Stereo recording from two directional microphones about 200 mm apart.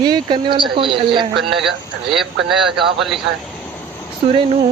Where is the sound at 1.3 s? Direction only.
Centre (ahead or behind).